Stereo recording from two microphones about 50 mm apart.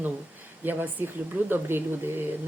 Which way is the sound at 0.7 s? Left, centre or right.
Right.